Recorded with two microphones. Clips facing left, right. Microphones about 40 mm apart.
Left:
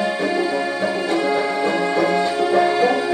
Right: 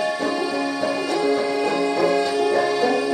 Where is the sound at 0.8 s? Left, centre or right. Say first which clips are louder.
Left 1 dB; left.